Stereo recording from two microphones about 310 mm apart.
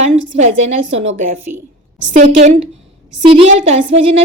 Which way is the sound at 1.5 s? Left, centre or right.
Right.